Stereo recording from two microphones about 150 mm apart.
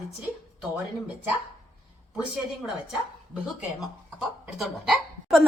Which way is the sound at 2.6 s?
5° right (ahead or behind).